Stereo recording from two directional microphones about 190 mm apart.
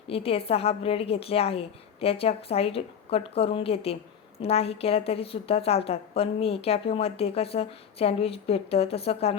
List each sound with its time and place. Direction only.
0.1 s a woman's voice: 30° left (ahead or behind)